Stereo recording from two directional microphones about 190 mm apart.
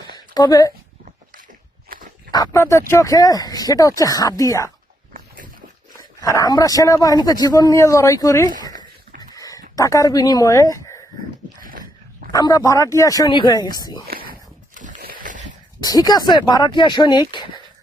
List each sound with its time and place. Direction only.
0.3 s speech: 20° left (ahead or behind)
1.0 s a sound: 45° right (ahead or behind)
1.9 s walk: 45° right (ahead or behind)
2.3 s speech: 15° left (ahead or behind)
6.0 s speech: 15° left (ahead or behind)
9.3 s a sound: 20° left (ahead or behind)
11.6 s dog: 45° right (ahead or behind)
12.3 s speech: 20° left (ahead or behind)
14.8 s a sound: 40° right (ahead or behind)
15.8 s speech: 20° left (ahead or behind)